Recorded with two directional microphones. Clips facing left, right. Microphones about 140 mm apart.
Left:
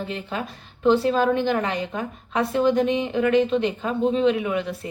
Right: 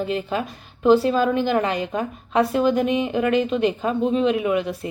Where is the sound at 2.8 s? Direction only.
25° left (ahead or behind).